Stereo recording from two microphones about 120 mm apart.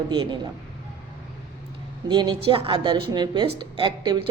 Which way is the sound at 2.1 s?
40° right (ahead or behind).